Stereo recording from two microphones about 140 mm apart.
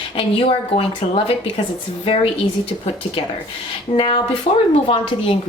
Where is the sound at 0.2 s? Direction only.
40° left (ahead or behind).